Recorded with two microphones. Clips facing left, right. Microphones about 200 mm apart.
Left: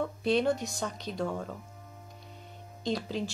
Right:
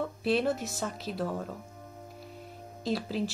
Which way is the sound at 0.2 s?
5° right (ahead or behind).